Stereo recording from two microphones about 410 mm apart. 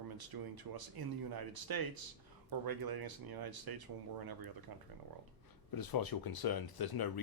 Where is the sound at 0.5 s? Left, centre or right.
Right.